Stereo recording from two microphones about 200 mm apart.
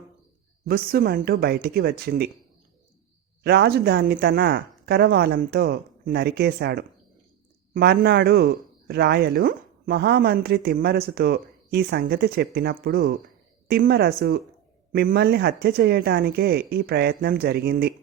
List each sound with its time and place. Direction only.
0.6 s speech: 50° right (ahead or behind)
3.4 s speech: 55° right (ahead or behind)